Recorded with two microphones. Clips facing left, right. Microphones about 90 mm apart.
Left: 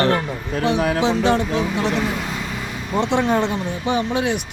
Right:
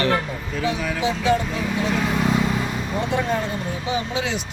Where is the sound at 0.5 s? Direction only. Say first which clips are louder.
Left 6 dB; 65° left (ahead or behind).